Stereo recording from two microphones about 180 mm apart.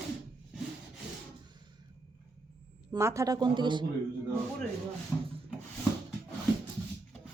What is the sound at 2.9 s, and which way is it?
Speech, 15° right (ahead or behind).